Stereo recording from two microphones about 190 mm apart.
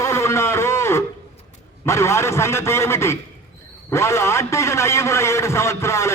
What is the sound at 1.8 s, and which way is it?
A man's voice, 15° left (ahead or behind).